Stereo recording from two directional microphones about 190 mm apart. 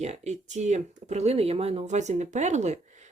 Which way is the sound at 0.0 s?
35° right (ahead or behind).